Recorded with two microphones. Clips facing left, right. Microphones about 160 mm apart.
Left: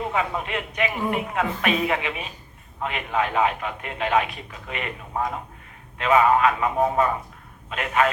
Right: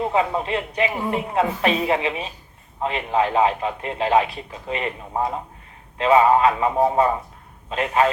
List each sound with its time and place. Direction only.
0.0 s a man's voice: 30° right (ahead or behind)